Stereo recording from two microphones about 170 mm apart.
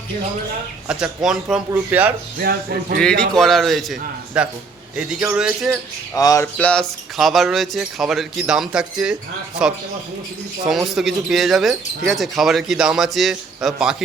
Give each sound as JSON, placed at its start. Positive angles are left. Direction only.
{"t": 0.9, "sound": "speech", "side_deg": -5}
{"t": 2.4, "sound": "speech", "side_deg": -60}
{"t": 3.0, "sound": "speech", "side_deg": 5}
{"t": 6.1, "sound": "a sound", "side_deg": 20}
{"t": 6.6, "sound": "speech", "side_deg": 5}